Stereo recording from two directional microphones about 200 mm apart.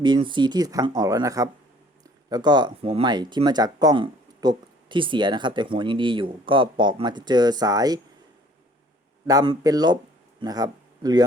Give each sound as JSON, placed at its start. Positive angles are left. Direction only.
{"t": 0.0, "sound": "speech", "side_deg": -25}
{"t": 9.2, "sound": "speech", "side_deg": -20}